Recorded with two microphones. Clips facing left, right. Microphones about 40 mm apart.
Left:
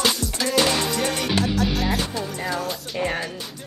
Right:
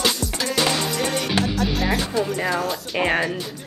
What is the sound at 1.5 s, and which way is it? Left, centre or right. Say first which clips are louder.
Music: right 1 dB; centre.